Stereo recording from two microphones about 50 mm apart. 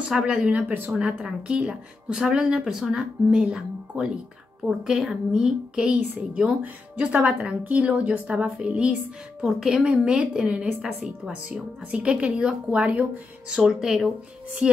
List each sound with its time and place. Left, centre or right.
0.0 s a woman's voice: centre
0.9 s a woman's voice: centre
6.6 s a woman's voice: right
9.4 s a woman's voice: centre
11.0 s a woman's voice: centre
11.4 s a woman's voice: right
13.5 s a woman's voice: centre